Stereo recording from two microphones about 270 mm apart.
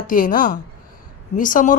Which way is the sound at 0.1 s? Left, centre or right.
Left.